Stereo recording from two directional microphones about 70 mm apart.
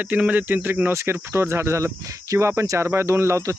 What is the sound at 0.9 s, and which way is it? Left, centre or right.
Speech, right.